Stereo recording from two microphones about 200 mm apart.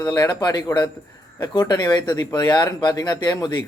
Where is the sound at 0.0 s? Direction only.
20° left (ahead or behind).